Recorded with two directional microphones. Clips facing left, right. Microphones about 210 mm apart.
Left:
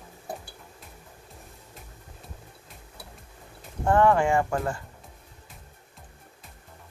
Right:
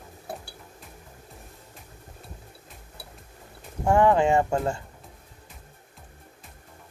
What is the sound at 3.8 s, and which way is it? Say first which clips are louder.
Speech: right 1 dB; 15° right (ahead or behind).